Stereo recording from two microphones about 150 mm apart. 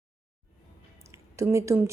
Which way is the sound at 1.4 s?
20° right (ahead or behind).